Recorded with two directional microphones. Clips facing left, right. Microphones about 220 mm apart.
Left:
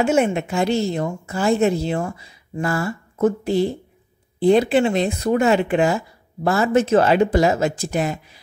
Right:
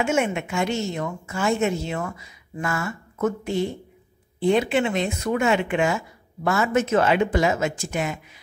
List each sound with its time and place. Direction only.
0.0 s speech: 35° left (ahead or behind)